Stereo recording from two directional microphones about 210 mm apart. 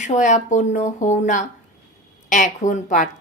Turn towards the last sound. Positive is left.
turn(degrees=35)  # may be behind; listen again after turning